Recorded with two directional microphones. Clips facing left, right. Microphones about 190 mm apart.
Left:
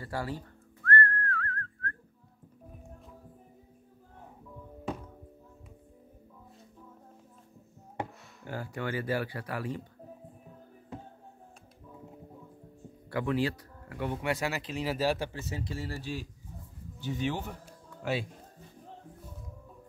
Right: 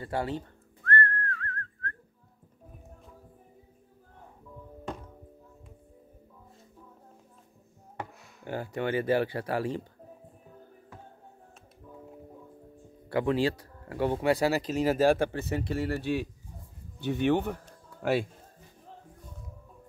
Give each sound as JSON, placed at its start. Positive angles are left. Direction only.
{"t": 0.0, "sound": "whistling", "side_deg": -25}
{"t": 8.5, "sound": "speech", "side_deg": -20}
{"t": 13.1, "sound": "a man's voice", "side_deg": -30}